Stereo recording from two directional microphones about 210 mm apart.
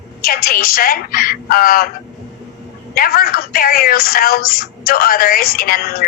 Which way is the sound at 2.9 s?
45° left (ahead or behind).